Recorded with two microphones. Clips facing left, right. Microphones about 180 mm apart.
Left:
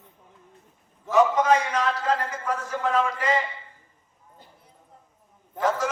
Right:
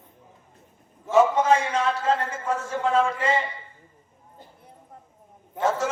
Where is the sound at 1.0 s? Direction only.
25° right (ahead or behind).